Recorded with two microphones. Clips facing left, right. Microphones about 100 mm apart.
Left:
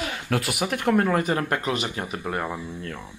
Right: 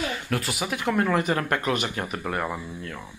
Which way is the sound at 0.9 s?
40° left (ahead or behind).